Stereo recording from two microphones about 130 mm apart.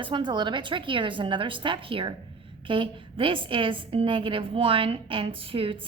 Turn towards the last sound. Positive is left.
turn(degrees=-45)  # may be behind; listen again after turning